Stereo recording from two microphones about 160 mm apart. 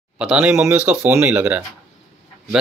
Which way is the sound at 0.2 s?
5° right (ahead or behind).